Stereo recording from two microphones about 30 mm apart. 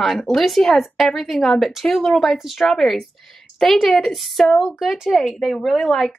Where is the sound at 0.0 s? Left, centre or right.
Centre.